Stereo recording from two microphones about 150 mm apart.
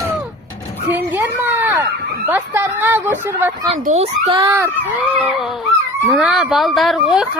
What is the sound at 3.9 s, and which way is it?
Speech, 40° right (ahead or behind).